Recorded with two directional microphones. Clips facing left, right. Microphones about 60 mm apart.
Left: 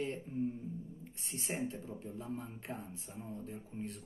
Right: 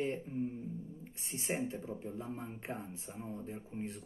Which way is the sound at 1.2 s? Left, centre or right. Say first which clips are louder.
Right 2 dB; right.